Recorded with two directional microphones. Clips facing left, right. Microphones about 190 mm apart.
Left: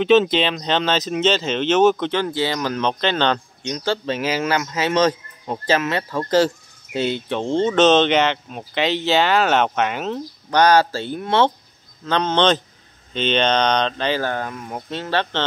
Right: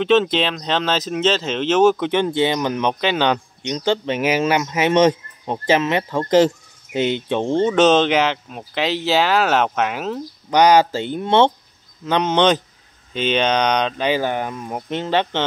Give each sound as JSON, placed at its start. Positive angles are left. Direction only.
{"t": 0.0, "sound": "speech", "side_deg": 0}
{"t": 2.1, "sound": "speech", "side_deg": -20}
{"t": 10.5, "sound": "speech", "side_deg": -15}